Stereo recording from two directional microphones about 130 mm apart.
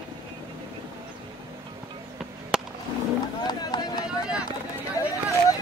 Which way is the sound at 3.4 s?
35° left (ahead or behind).